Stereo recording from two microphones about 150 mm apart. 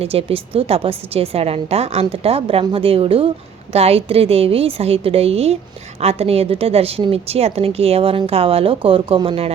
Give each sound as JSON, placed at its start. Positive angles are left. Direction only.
{"t": 0.0, "sound": "a woman's voice", "side_deg": -40}